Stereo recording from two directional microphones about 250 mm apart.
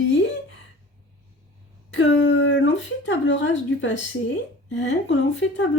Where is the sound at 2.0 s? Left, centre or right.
Left.